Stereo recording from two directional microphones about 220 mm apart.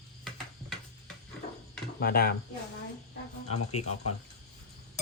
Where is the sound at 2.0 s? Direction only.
45° left (ahead or behind).